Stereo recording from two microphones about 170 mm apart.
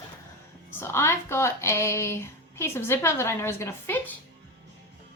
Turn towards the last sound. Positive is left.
turn(degrees=15)  # may be behind; listen again after turning